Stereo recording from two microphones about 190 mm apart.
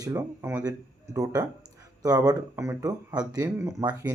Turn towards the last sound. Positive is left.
turn(degrees=-15)  # may be behind; listen again after turning